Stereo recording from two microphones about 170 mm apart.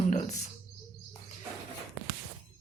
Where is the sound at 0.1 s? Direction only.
45° left (ahead or behind).